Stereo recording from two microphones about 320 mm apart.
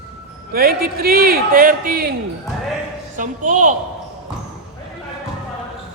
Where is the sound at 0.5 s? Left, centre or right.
Right.